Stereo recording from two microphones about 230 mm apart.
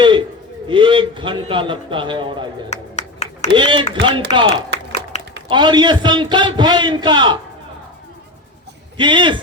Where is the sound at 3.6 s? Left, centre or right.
Right.